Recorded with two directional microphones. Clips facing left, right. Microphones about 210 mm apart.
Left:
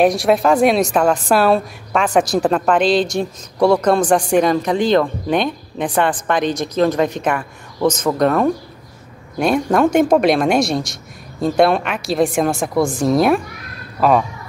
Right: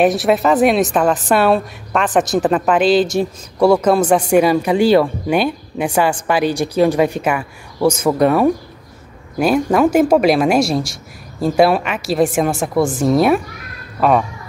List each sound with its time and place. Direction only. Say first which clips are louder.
0.0 s a woman's voice: even; 5° right (ahead or behind)